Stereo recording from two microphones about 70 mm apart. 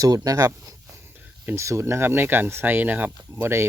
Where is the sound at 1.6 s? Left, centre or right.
Right.